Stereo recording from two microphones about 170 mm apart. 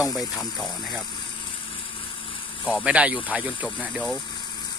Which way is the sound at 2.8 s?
5° right (ahead or behind).